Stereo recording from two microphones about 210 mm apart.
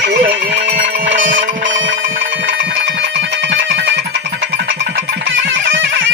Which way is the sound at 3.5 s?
60° right (ahead or behind).